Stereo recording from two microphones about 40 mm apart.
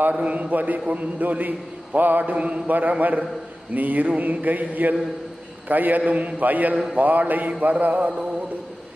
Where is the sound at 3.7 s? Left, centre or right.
Right.